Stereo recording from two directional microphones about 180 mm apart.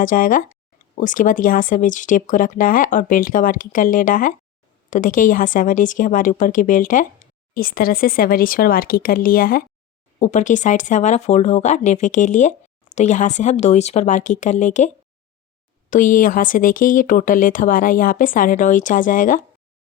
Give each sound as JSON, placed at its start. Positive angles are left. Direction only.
{"t": 0.0, "sound": "speech", "side_deg": 45}
{"t": 10.2, "sound": "speech", "side_deg": 40}
{"t": 15.9, "sound": "speech", "side_deg": 45}